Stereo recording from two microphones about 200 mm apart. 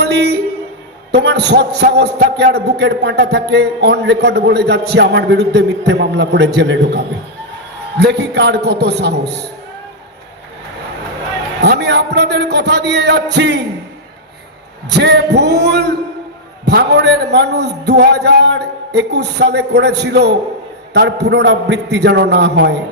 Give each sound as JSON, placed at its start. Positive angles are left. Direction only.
{"t": 0.0, "sound": "a sound", "side_deg": -60}
{"t": 1.1, "sound": "a man's voice", "side_deg": -55}
{"t": 11.6, "sound": "a man's voice", "side_deg": -60}
{"t": 14.8, "sound": "a man's voice", "side_deg": -60}